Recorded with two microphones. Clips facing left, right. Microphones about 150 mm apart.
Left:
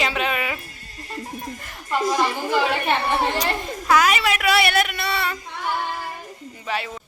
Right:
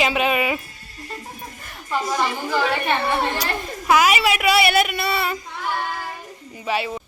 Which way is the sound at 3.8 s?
10° right (ahead or behind).